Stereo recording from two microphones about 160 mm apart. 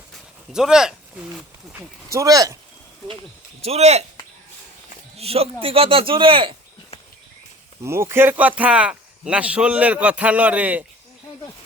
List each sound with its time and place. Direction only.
0.1 s a sound: 5° right (ahead or behind)
2.1 s speech: 25° right (ahead or behind)
3.6 s speech: 40° right (ahead or behind)
5.1 s speech: 40° right (ahead or behind)
7.9 s speech: 15° right (ahead or behind)